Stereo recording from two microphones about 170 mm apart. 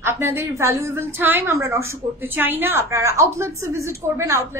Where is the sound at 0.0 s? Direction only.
15° right (ahead or behind).